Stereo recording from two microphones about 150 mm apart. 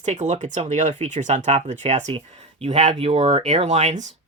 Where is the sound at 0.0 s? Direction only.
50° right (ahead or behind).